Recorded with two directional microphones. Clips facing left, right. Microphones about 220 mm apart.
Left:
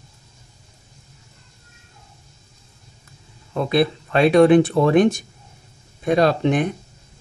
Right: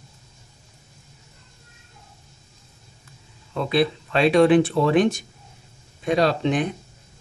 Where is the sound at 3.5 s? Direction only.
45° left (ahead or behind).